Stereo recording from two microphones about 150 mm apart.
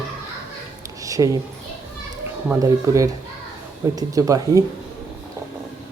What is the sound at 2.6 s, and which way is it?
Speech, 20° right (ahead or behind).